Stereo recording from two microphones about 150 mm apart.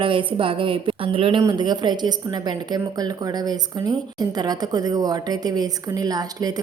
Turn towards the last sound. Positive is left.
turn(degrees=-25)  # may be behind; listen again after turning